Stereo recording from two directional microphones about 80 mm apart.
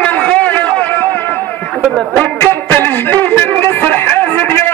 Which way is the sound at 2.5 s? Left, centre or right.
Left.